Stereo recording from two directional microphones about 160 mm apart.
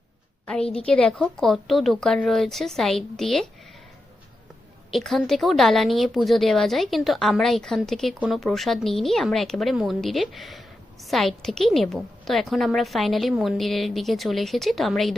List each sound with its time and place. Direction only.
0.4 s a woman's voice: 5° left (ahead or behind)
4.9 s a woman's voice: centre (ahead or behind)